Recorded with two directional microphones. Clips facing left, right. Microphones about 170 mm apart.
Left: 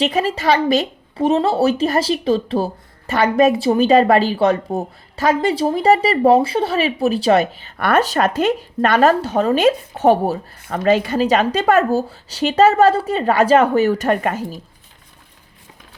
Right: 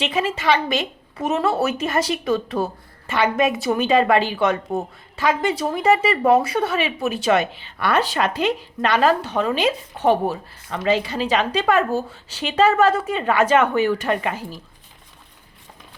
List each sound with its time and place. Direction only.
0.0 s a woman's voice: 40° left (ahead or behind)
3.1 s a woman's voice: 40° left (ahead or behind)